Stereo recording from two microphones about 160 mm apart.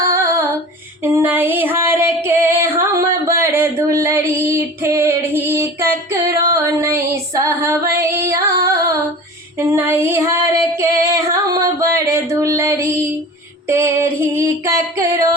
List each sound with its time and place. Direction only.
0.1 s female singing: 20° right (ahead or behind)